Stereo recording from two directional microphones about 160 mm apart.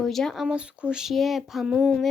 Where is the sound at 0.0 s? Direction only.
Centre (ahead or behind).